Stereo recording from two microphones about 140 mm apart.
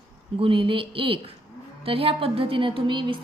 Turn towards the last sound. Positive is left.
turn(degrees=-35)  # may be behind; listen again after turning